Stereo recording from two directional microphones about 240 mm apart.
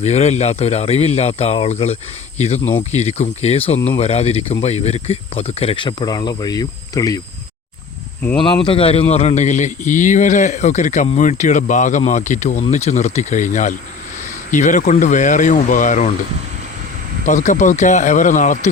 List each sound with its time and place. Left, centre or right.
0.0 s speech: left
8.4 s speech: left
17.2 s speech: left